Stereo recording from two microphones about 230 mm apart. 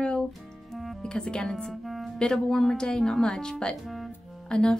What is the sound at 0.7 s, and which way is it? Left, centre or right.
A woman's voice, centre.